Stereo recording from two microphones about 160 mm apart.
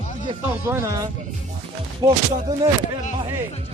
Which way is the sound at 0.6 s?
15° right (ahead or behind).